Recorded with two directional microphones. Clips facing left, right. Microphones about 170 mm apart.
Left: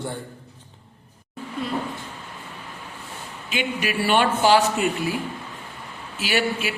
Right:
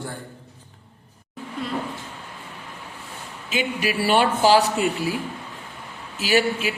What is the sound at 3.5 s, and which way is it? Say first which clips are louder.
Speech: right 1 dB; 40° right (ahead or behind).